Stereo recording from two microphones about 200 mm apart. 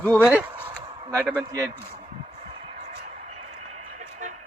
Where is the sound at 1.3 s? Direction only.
15° right (ahead or behind).